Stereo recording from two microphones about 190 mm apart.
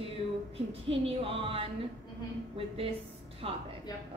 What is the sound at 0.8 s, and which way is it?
A man's voice, 30° right (ahead or behind).